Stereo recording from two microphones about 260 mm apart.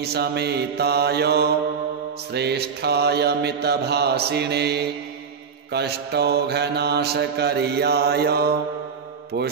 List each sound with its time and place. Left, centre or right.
0.0 s mantra: right